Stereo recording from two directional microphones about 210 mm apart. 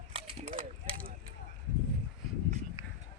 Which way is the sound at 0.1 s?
25° right (ahead or behind).